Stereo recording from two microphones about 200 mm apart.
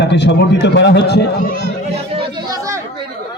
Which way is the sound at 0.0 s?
60° left (ahead or behind).